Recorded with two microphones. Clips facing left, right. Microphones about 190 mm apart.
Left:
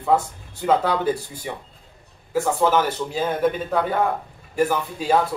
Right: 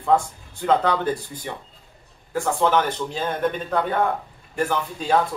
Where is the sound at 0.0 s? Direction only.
5° left (ahead or behind).